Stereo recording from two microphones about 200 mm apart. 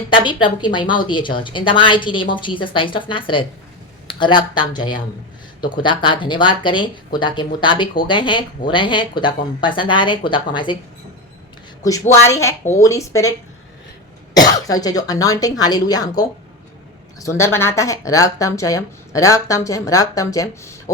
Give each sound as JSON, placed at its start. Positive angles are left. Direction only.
{"t": 0.1, "sound": "speech", "side_deg": 25}
{"t": 11.8, "sound": "speech", "side_deg": 15}
{"t": 14.7, "sound": "speech", "side_deg": 20}